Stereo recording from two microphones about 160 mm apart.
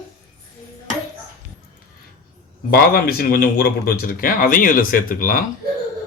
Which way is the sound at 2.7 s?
70° left (ahead or behind).